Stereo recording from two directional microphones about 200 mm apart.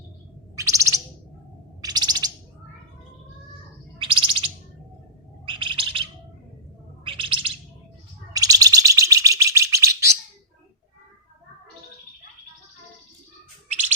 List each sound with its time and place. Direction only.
0.5 s bird: 15° right (ahead or behind)
3.9 s bird: 25° right (ahead or behind)
5.5 s bird: 25° right (ahead or behind)
7.0 s chirp: 25° right (ahead or behind)
8.4 s bird: 15° right (ahead or behind)